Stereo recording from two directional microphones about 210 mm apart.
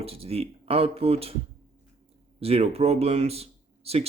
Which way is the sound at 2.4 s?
30° right (ahead or behind).